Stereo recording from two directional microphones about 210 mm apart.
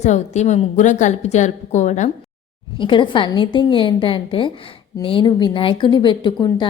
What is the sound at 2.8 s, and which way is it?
A woman's voice, 25° left (ahead or behind).